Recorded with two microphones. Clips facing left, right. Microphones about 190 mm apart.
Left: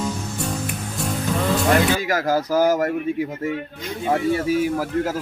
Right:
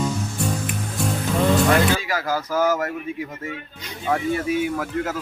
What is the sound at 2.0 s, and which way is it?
Speech, 45° left (ahead or behind).